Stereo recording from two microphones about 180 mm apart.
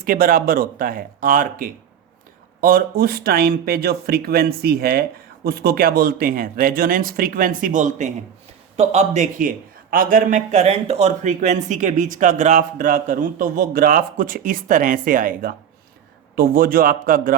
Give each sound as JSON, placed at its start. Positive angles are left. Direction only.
{"t": 0.0, "sound": "a man's voice", "side_deg": -50}